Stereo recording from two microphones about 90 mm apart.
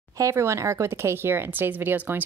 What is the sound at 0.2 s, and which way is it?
Speech, 35° right (ahead or behind).